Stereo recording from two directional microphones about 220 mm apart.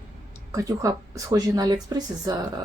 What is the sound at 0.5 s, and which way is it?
Speech, 15° right (ahead or behind).